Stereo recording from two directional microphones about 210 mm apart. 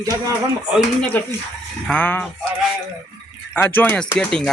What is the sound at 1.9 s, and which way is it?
Speech, 5° left (ahead or behind).